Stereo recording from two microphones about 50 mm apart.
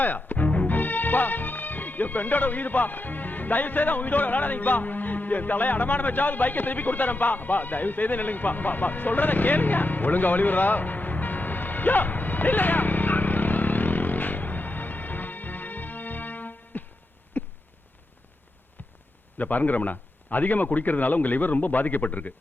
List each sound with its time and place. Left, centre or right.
0.0 s music: left
17.4 s a sound: left
19.4 s speech: left